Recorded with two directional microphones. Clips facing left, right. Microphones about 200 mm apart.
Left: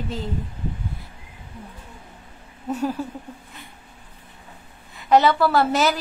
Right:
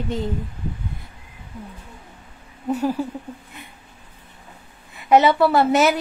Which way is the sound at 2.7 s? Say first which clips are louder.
Right 3 dB; 10° right (ahead or behind).